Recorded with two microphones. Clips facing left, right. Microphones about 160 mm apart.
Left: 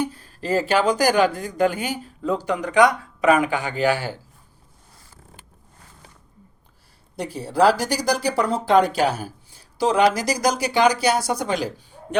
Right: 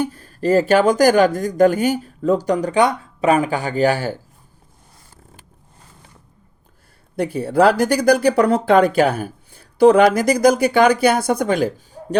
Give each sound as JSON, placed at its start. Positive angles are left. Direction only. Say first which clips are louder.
{"t": 0.0, "sound": "speech", "louder": "right 6 dB", "side_deg": -45}
{"t": 7.2, "sound": "speech", "louder": "right 4 dB", "side_deg": -55}